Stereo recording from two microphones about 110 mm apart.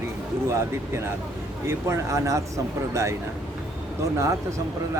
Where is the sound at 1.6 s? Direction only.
25° right (ahead or behind).